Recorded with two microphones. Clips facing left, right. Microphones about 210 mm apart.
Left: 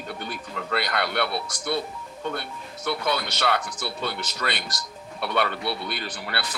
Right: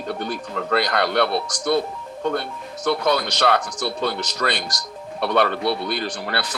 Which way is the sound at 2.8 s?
40° right (ahead or behind).